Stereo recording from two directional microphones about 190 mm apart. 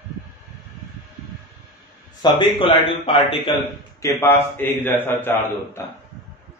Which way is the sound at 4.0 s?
15° left (ahead or behind).